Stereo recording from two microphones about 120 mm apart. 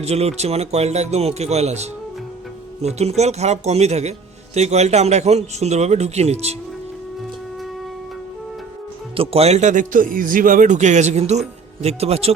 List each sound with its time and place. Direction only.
0.0 s a man's voice: 60° right (ahead or behind)
9.1 s a man's voice: 55° right (ahead or behind)